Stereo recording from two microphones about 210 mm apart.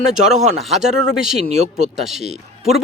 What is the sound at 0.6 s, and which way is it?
Speech, centre (ahead or behind).